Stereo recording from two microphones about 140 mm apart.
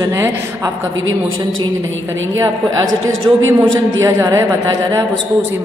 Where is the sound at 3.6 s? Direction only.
20° right (ahead or behind).